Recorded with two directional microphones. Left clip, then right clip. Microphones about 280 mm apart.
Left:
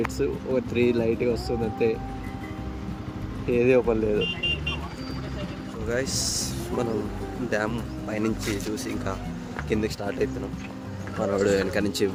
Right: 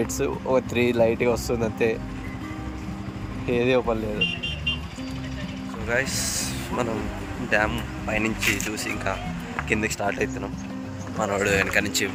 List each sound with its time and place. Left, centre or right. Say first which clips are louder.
0.2 s speech: right 6 dB; centre
3.5 s speech: left 1 dB; centre
5.9 s speech: right 2 dB; centre
11.2 s speech: right 1 dB; centre